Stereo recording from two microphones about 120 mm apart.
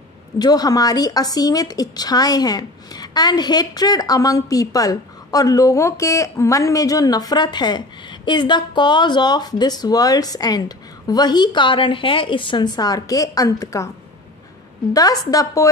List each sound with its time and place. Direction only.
0.4 s a woman's voice: 35° left (ahead or behind)
14.9 s a woman's voice: 30° left (ahead or behind)